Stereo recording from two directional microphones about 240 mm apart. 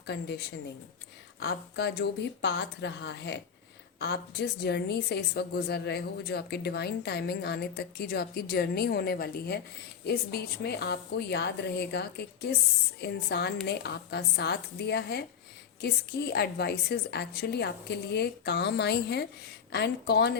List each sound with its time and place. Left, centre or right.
0.0 s a woman's voice: left